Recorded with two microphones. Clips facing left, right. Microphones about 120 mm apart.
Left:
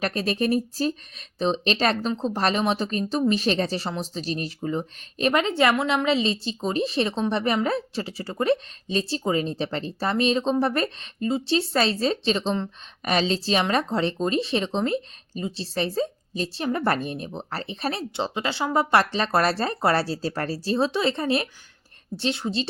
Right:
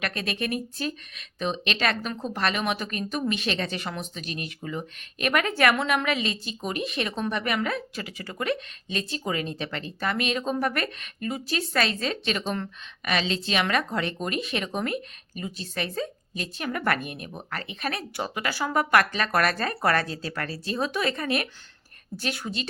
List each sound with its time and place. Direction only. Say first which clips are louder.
0.0 s a woman's voice: left 6 dB; 35° left (ahead or behind)